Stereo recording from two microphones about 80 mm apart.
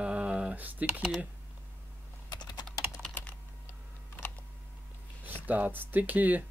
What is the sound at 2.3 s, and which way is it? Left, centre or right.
Typing, left.